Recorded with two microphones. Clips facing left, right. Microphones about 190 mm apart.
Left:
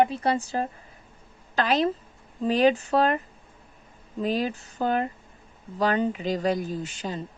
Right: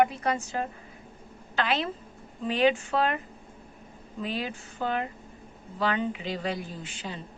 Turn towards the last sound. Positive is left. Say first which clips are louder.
# left 7 dB
turn(degrees=40)  # may be behind; listen again after turning